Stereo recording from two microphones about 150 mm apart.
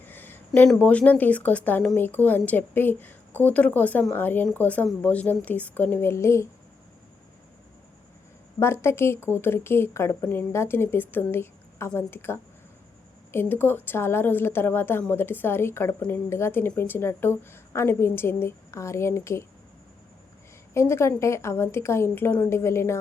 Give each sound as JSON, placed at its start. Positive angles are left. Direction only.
{"t": 0.0, "sound": "speech", "side_deg": 15}
{"t": 8.5, "sound": "speech", "side_deg": 15}
{"t": 20.7, "sound": "speech", "side_deg": 20}